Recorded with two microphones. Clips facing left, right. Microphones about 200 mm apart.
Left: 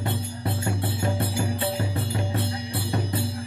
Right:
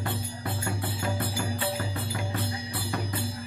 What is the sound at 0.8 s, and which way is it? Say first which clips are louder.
Music: left 4 dB; 25° left (ahead or behind).